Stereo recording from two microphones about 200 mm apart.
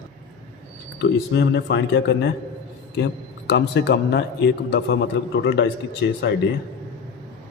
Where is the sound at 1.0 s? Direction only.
55° left (ahead or behind).